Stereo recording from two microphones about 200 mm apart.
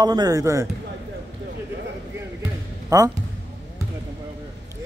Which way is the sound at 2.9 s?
15° right (ahead or behind).